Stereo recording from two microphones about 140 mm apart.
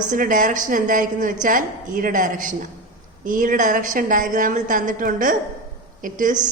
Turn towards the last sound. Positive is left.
turn(degrees=-70)  # may be behind; listen again after turning